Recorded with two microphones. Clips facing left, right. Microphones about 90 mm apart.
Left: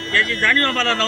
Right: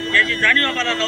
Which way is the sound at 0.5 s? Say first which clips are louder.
Left 1 dB; 35° left (ahead or behind).